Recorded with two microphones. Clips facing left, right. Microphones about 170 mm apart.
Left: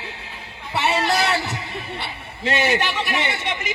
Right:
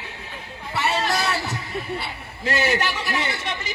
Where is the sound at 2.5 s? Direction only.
20° left (ahead or behind).